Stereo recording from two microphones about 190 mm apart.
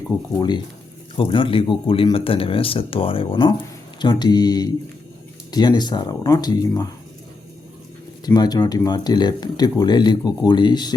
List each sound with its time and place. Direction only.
0.3 s speech: 20° left (ahead or behind)
8.2 s speech: 20° left (ahead or behind)